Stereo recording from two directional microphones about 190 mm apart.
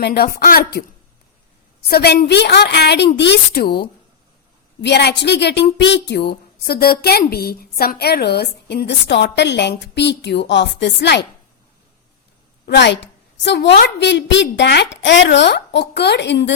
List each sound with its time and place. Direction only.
0.0 s speech: 55° left (ahead or behind)
1.9 s a woman's voice: 60° left (ahead or behind)
12.6 s a woman's voice: 65° left (ahead or behind)